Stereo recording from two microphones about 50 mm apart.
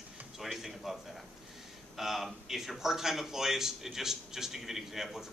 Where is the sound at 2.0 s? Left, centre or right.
Centre.